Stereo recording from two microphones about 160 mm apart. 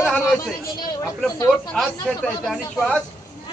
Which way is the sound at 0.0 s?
5° left (ahead or behind).